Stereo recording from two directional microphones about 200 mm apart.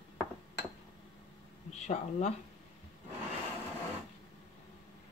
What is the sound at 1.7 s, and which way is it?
Speech, 35° left (ahead or behind).